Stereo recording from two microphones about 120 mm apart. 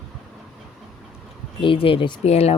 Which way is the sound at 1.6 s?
50° left (ahead or behind).